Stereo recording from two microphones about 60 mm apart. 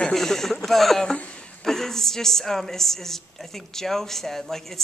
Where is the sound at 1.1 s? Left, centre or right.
Left.